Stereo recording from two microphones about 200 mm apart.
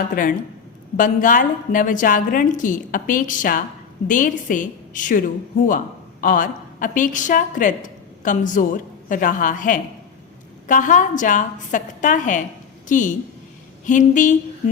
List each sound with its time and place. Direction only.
0.1 s a woman's voice: 40° left (ahead or behind)
6.2 s a woman's voice: 45° left (ahead or behind)